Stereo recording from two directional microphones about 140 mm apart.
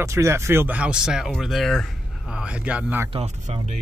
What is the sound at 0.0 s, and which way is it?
A man's voice, 20° right (ahead or behind).